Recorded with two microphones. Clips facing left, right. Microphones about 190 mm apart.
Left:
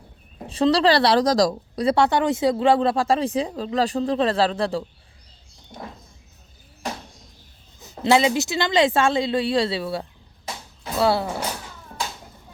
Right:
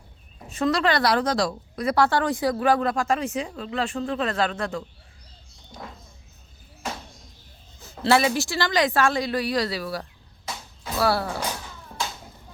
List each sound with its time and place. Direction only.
0.3 s a woman's voice: 30° left (ahead or behind)
7.8 s speech: 20° left (ahead or behind)